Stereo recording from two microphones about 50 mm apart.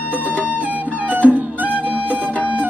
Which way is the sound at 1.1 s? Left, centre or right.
Right.